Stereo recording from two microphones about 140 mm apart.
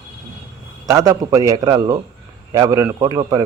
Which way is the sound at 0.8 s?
25° right (ahead or behind).